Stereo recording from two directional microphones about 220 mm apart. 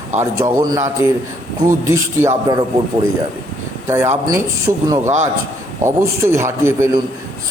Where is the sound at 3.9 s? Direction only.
10° right (ahead or behind).